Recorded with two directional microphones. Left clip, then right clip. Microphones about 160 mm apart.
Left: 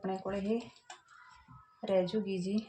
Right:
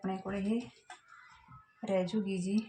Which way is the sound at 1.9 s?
30° left (ahead or behind).